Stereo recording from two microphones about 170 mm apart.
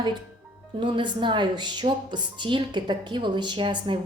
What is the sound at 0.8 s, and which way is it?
Speech, 30° right (ahead or behind).